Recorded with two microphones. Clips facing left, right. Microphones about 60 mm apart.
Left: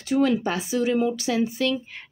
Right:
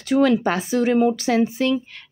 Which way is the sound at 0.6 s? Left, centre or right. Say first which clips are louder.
Right 4 dB; right.